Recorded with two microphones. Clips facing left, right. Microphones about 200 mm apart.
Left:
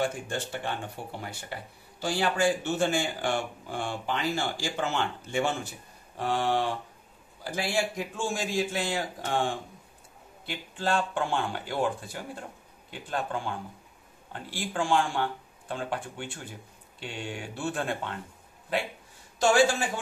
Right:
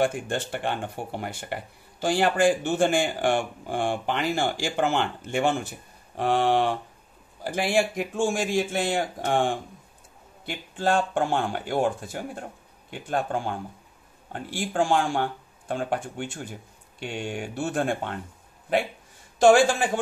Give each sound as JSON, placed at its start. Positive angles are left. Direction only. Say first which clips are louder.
{"t": 0.0, "sound": "speech", "louder": "right 5 dB", "side_deg": -55}
{"t": 19.3, "sound": "speech", "louder": "right 5 dB", "side_deg": -50}